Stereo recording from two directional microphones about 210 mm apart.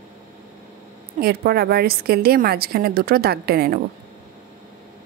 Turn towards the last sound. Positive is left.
turn(degrees=-45)  # may be behind; listen again after turning